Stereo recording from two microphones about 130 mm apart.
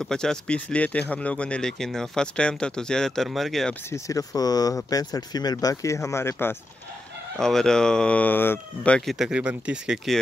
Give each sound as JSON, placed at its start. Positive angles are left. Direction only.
{"t": 0.0, "sound": "speech", "side_deg": 5}
{"t": 3.9, "sound": "speech", "side_deg": 25}
{"t": 7.3, "sound": "speech", "side_deg": 5}
{"t": 9.2, "sound": "speech", "side_deg": -10}